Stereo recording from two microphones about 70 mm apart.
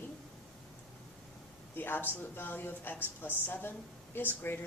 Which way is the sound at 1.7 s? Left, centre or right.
Left.